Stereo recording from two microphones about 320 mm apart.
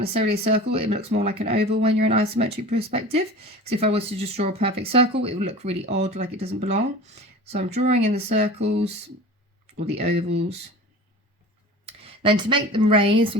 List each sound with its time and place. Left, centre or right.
0.0 s speech: centre
11.9 s speech: centre